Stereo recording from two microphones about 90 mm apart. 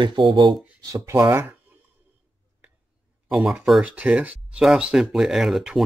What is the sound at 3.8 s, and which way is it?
Speech, 15° right (ahead or behind).